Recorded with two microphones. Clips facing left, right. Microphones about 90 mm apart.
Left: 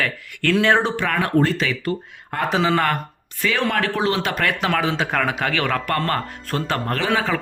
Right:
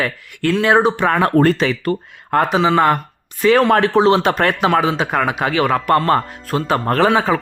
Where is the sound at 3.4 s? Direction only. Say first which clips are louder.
Right 9 dB; 20° right (ahead or behind).